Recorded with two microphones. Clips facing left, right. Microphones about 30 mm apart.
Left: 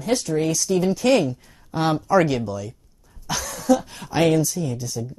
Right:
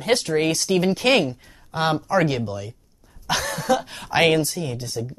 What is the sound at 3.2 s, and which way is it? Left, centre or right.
Speech, right.